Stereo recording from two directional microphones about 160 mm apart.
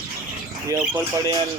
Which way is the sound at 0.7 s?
10° right (ahead or behind).